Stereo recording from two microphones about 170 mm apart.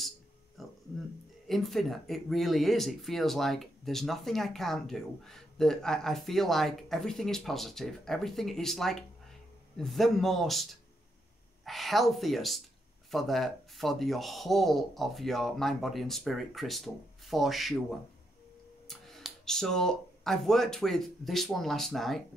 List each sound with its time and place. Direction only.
0.6 s a sound: centre (ahead or behind)
1.5 s speech: centre (ahead or behind)
18.9 s speech: centre (ahead or behind)